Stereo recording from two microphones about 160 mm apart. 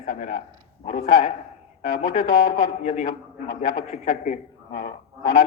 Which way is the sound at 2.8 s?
50° left (ahead or behind).